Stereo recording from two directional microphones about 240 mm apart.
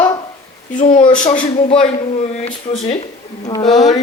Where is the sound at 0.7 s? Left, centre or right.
Left.